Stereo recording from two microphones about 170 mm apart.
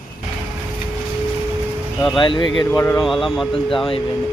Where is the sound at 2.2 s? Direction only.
25° left (ahead or behind).